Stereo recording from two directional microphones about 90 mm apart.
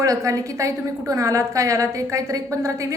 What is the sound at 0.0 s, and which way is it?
A woman's voice, 35° right (ahead or behind).